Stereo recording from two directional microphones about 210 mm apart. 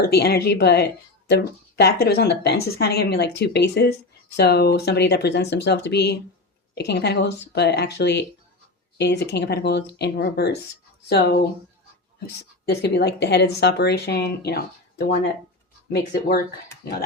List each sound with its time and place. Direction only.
0.0 s a woman's voice: 50° left (ahead or behind)